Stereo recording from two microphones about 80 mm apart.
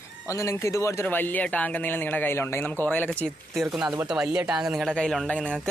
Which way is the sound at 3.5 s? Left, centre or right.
Centre.